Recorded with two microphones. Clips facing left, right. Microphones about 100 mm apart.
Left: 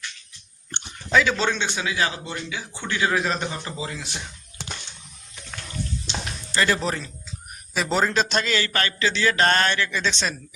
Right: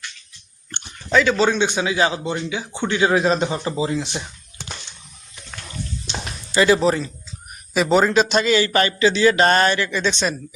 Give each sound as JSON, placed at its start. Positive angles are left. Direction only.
{"t": 1.1, "sound": "a man's voice", "side_deg": 0}
{"t": 1.5, "sound": "a man's voice", "side_deg": -15}
{"t": 6.1, "sound": "a sound", "side_deg": -10}
{"t": 6.8, "sound": "a man's voice", "side_deg": -5}